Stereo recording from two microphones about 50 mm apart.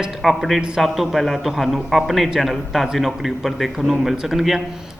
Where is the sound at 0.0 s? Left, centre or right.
Centre.